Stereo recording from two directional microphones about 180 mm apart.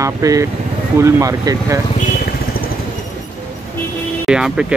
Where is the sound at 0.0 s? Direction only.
20° right (ahead or behind).